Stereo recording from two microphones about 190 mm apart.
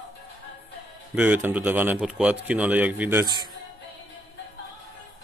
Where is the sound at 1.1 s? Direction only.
5° right (ahead or behind).